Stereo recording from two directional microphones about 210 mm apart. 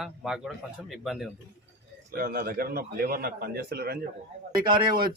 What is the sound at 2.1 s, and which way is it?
A man's voice, 45° right (ahead or behind).